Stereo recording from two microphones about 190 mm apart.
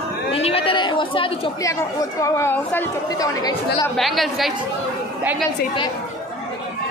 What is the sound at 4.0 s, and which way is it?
Speech, centre (ahead or behind).